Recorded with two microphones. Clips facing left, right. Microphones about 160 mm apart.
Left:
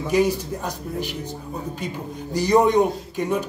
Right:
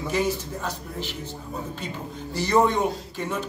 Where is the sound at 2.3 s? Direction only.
15° left (ahead or behind).